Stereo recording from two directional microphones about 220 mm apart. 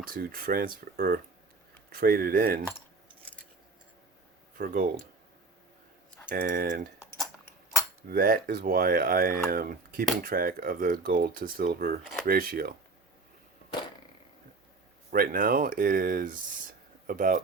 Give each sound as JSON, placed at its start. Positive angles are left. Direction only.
{"t": 0.1, "sound": "speech", "side_deg": -40}
{"t": 4.5, "sound": "speech", "side_deg": -40}
{"t": 6.3, "sound": "speech", "side_deg": -40}
{"t": 7.2, "sound": "a sound", "side_deg": 5}
{"t": 8.1, "sound": "speech", "side_deg": -40}
{"t": 15.1, "sound": "speech", "side_deg": -40}